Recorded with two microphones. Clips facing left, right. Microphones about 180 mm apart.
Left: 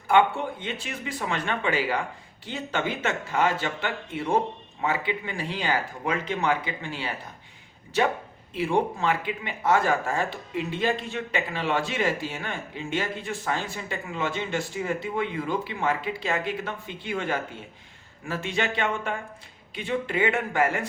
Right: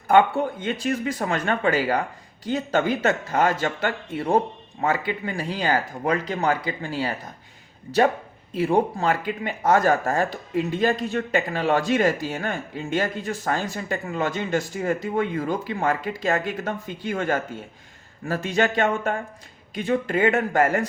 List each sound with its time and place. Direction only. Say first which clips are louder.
0.1 s speech: right 4 dB; 45° right (ahead or behind)
8.5 s speech: right 4 dB; 40° right (ahead or behind)